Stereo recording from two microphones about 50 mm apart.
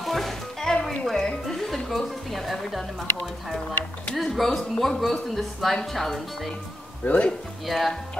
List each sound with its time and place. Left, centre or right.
0.0 s music: centre
4.1 s speech: centre
7.1 s speech: left
7.6 s speech: centre